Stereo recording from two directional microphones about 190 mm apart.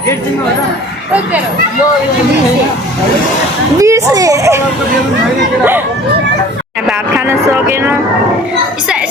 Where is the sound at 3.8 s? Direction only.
15° right (ahead or behind).